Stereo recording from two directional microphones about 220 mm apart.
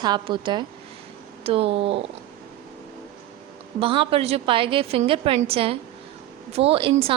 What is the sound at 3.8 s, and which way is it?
A woman's voice, 25° right (ahead or behind).